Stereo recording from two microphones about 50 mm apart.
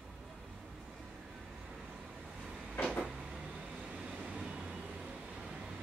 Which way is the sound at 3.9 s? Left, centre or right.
Right.